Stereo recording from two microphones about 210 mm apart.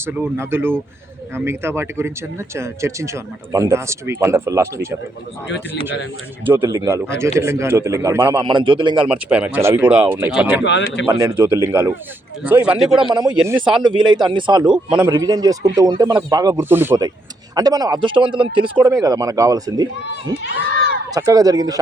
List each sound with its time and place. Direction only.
0.0 s speech: 10° right (ahead or behind)
6.4 s speech: 10° right (ahead or behind)
9.0 s speech: 5° right (ahead or behind)
10.6 s a man's voice: 60° left (ahead or behind)
11.0 s speech: 15° right (ahead or behind)
13.0 s speech: 20° right (ahead or behind)
21.1 s speech: 15° right (ahead or behind)